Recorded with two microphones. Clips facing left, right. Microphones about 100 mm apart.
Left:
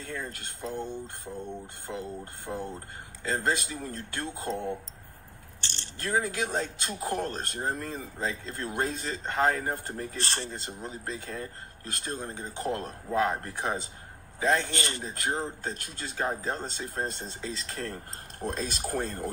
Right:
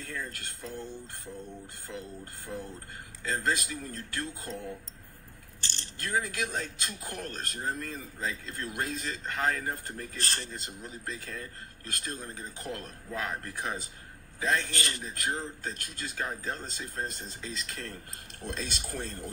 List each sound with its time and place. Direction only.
0.0 s speech: 25° left (ahead or behind); by 19.3 s 50° left (ahead or behind)